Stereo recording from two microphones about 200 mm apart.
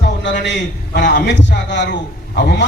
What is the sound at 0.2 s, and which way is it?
A man's voice, 65° left (ahead or behind).